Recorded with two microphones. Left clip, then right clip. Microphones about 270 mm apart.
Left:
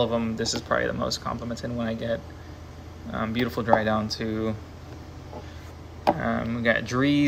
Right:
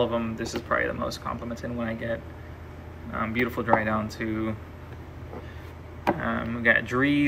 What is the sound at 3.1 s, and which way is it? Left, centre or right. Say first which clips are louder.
Speech: even; centre.